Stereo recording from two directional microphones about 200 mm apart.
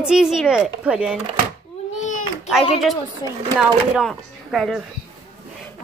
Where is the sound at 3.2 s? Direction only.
20° left (ahead or behind).